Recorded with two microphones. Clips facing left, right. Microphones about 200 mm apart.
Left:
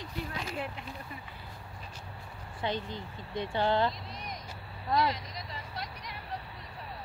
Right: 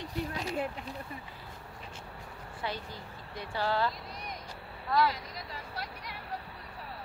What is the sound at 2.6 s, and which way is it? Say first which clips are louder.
Speech: left 5 dB; 25° left (ahead or behind).